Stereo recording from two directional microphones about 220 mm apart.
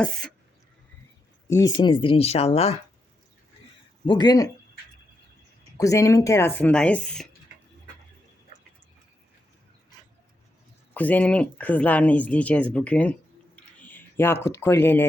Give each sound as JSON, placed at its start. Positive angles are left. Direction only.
{"t": 0.0, "sound": "speech", "side_deg": 5}
{"t": 1.5, "sound": "speech", "side_deg": 15}
{"t": 4.0, "sound": "speech", "side_deg": 20}
{"t": 5.7, "sound": "speech", "side_deg": 15}
{"t": 10.9, "sound": "speech", "side_deg": 5}